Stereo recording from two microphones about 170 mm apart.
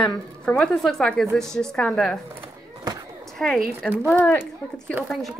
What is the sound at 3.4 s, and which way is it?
A woman's voice, centre (ahead or behind).